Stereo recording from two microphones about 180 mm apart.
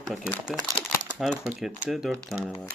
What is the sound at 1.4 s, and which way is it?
Speech, 5° right (ahead or behind).